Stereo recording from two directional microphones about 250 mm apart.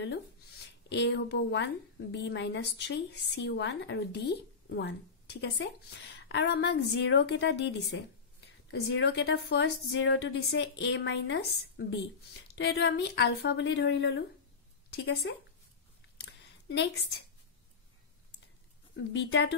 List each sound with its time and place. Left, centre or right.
0.8 s a woman's voice: left
16.2 s a sound: left
18.9 s a woman's voice: left